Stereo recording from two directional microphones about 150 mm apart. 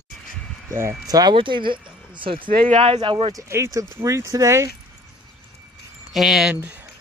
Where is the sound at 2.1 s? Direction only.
35° right (ahead or behind).